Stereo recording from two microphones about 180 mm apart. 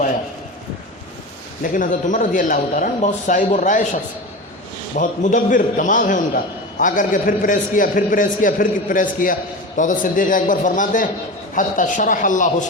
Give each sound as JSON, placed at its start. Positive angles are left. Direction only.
{"t": 1.6, "sound": "a man's voice", "side_deg": 50}
{"t": 4.9, "sound": "a man's voice", "side_deg": 45}